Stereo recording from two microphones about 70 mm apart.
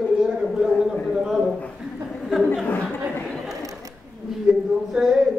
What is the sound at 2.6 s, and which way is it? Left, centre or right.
Speech, left.